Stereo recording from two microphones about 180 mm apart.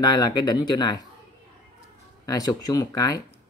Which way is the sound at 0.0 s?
25° left (ahead or behind).